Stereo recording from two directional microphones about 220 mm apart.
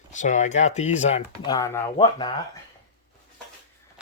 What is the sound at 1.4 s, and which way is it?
Speech, 15° left (ahead or behind).